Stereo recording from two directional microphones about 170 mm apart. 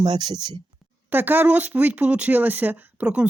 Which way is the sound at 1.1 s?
10° right (ahead or behind).